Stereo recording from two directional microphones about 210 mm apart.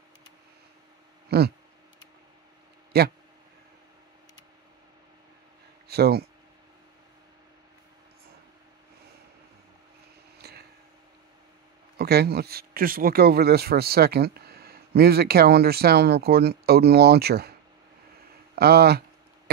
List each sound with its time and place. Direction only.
1.3 s speech: 50° right (ahead or behind)
2.9 s speech: 50° right (ahead or behind)
5.9 s speech: 50° right (ahead or behind)
10.4 s a sound: 50° right (ahead or behind)
12.0 s speech: 50° right (ahead or behind)
18.5 s a sound: 50° right (ahead or behind)